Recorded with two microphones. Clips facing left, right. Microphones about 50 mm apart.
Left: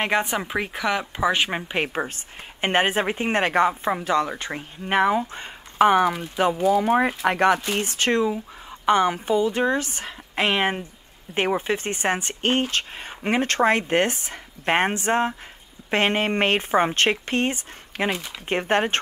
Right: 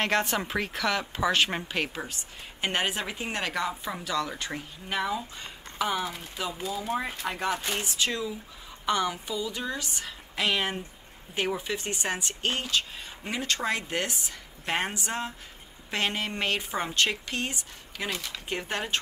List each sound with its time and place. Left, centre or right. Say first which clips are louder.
0.0 s a woman's voice: left 3 dB; centre
2.6 s speech: left 8 dB; left
7.8 s speech: left 9 dB; left